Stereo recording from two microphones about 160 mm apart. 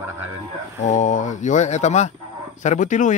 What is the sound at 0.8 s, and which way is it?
Speech, 50° left (ahead or behind).